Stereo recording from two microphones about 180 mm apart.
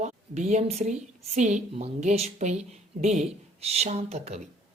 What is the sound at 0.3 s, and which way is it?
A woman's voice, 40° right (ahead or behind).